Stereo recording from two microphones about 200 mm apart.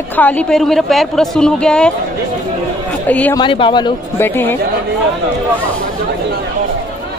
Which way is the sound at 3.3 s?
25° left (ahead or behind).